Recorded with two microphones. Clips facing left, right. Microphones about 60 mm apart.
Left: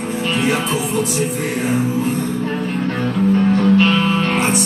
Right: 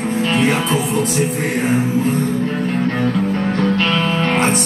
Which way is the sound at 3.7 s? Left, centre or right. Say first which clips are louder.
Left 3 dB; centre.